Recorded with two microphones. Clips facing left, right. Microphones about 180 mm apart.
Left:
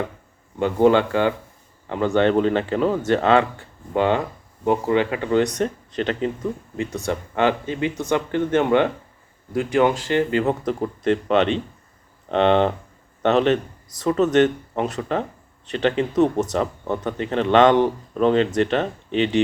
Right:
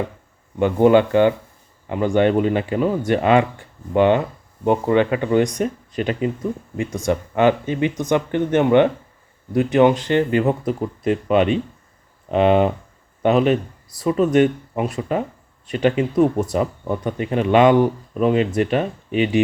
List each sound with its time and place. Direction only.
0.6 s speech: 15° right (ahead or behind)
10.7 s speech: 10° right (ahead or behind)